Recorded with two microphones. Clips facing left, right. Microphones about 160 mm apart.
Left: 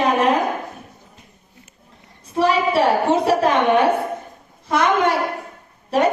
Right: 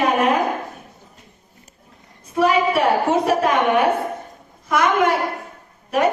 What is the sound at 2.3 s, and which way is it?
A woman's voice, 30° left (ahead or behind).